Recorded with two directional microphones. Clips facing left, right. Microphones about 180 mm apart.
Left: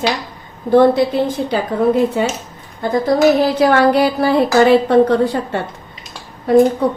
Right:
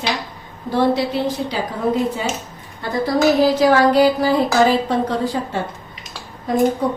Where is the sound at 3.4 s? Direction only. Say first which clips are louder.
Left 1 dB; 60° left (ahead or behind).